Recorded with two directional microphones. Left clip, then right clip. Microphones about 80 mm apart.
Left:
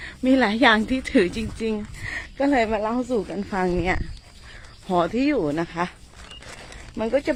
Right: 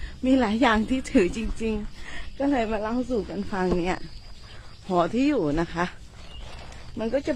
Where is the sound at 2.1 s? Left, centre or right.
Left.